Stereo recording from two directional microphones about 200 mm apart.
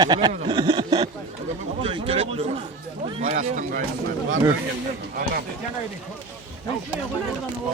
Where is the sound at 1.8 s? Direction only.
25° right (ahead or behind); by 3.8 s 45° right (ahead or behind).